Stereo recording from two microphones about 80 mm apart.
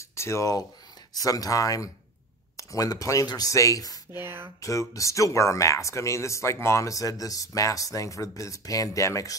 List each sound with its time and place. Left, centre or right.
0.1 s speech: left
4.1 s speech: right
4.6 s speech: left